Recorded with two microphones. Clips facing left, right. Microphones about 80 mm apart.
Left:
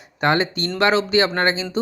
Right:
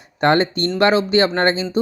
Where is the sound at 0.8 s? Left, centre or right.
Right.